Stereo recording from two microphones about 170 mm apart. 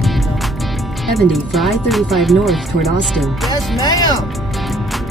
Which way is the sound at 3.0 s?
Centre (ahead or behind).